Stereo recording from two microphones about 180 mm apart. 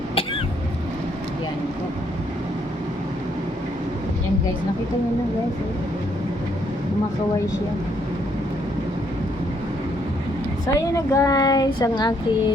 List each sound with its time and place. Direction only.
10.8 s speech: 15° left (ahead or behind)